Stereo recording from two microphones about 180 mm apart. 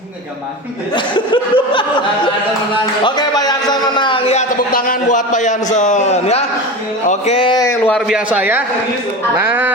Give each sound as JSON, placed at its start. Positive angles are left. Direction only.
{"t": 0.9, "sound": "speech", "side_deg": 25}
{"t": 3.0, "sound": "a sound", "side_deg": 20}
{"t": 4.7, "sound": "a man's voice", "side_deg": 50}
{"t": 7.6, "sound": "speech", "side_deg": 15}
{"t": 7.9, "sound": "a man's voice", "side_deg": -5}